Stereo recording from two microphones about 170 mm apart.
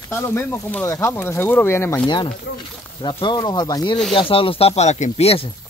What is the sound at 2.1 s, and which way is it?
Speech, 25° left (ahead or behind).